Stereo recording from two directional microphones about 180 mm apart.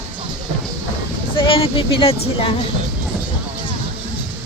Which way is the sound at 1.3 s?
30° left (ahead or behind).